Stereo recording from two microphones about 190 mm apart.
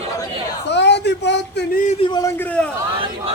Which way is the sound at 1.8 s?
30° left (ahead or behind).